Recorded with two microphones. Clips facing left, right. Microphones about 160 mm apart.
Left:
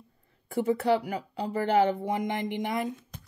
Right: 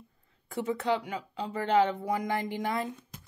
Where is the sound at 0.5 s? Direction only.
30° left (ahead or behind).